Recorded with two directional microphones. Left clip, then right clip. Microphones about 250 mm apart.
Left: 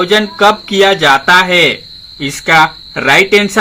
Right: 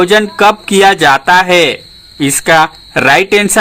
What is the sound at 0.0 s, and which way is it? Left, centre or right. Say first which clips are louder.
Speech: right 2 dB; right.